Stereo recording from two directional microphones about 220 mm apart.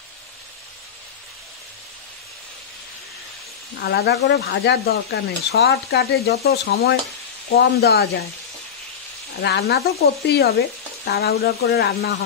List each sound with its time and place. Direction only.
3.8 s speech: 50° left (ahead or behind)
9.4 s speech: 45° left (ahead or behind)